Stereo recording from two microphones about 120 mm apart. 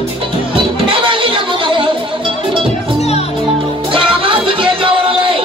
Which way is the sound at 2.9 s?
60° left (ahead or behind).